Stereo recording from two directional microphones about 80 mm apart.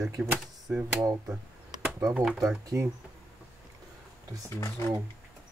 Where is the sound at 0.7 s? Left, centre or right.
Right.